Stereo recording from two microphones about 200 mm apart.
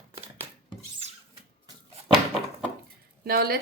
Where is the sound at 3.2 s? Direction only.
50° right (ahead or behind).